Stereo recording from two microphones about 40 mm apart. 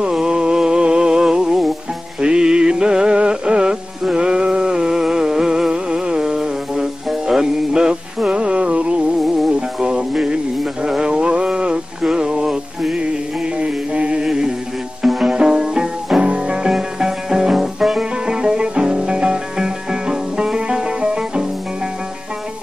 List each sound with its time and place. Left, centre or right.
0.0 s music: centre
9.5 s music: centre
14.2 s music: centre
18.1 s music: right